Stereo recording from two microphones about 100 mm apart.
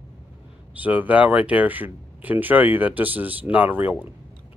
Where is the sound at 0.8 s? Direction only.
15° right (ahead or behind).